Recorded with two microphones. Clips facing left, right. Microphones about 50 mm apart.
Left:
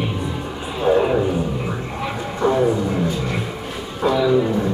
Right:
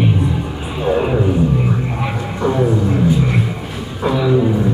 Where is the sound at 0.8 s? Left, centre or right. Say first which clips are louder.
Even; centre.